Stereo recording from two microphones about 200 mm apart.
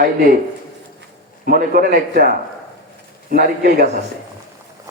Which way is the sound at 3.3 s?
50° right (ahead or behind).